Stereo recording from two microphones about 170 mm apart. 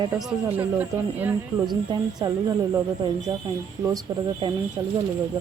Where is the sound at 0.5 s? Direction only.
10° right (ahead or behind).